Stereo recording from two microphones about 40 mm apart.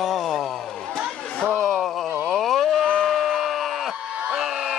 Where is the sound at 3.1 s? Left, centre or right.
Centre.